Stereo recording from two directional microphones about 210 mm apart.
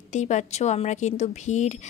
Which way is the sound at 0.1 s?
35° left (ahead or behind).